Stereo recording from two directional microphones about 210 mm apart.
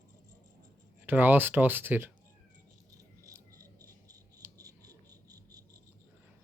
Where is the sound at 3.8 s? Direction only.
15° right (ahead or behind).